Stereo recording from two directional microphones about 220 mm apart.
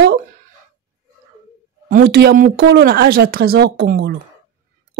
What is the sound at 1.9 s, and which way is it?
Speech, 45° right (ahead or behind).